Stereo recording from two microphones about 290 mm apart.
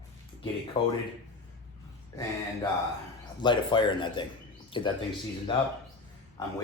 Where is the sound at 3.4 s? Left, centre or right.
Centre.